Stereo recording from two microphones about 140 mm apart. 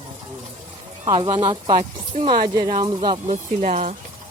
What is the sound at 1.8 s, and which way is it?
Speech, 50° right (ahead or behind).